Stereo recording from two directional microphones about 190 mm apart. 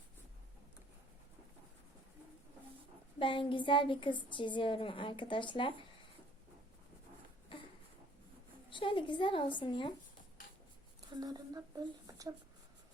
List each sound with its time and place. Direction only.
3.2 s a woman's voice: 25° left (ahead or behind)
8.7 s a woman's voice: 25° left (ahead or behind)
11.1 s speech: 20° right (ahead or behind)